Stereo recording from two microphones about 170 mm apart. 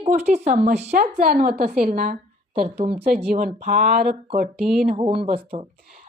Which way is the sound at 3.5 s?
40° right (ahead or behind).